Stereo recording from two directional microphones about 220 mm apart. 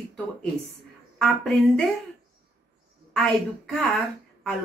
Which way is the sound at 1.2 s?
Centre (ahead or behind).